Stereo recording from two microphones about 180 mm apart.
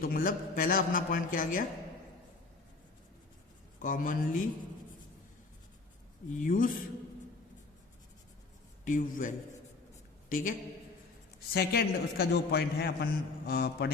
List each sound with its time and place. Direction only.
0.0 s a man's voice: 55° left (ahead or behind)
3.8 s a man's voice: 45° left (ahead or behind)
6.3 s a man's voice: 45° left (ahead or behind)
8.8 s a man's voice: 45° left (ahead or behind)
11.5 s a man's voice: 60° left (ahead or behind)